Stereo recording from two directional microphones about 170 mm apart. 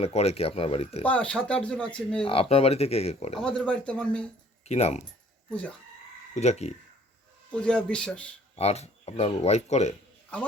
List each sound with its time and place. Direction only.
0.0 s speech: 35° left (ahead or behind)
1.0 s speech: 5° left (ahead or behind)
2.2 s speech: 35° left (ahead or behind)
3.3 s speech: 5° left (ahead or behind)
4.6 s speech: 40° left (ahead or behind)
5.5 s speech: 5° left (ahead or behind)
6.3 s speech: 40° left (ahead or behind)
7.6 s speech: 5° left (ahead or behind)
8.5 s speech: 40° left (ahead or behind)